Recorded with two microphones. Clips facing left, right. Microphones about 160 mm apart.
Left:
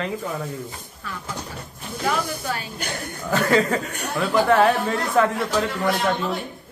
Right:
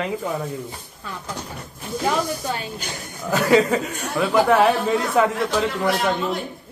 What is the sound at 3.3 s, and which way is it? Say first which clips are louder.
Speech: right 3 dB; 10° right (ahead or behind).